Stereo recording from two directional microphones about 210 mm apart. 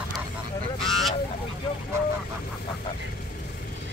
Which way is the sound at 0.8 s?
Centre (ahead or behind).